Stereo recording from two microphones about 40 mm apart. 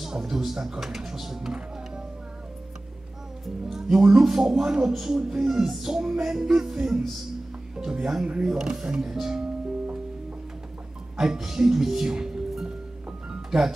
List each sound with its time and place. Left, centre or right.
0.0 s speech: centre
3.6 s music: centre
7.7 s speech: centre
8.5 s music: centre
11.1 s music: centre
13.3 s music: centre